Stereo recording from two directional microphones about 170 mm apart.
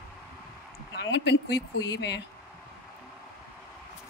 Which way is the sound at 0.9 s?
90° left.